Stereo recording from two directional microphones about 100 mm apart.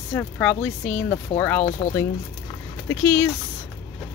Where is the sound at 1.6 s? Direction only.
90° left.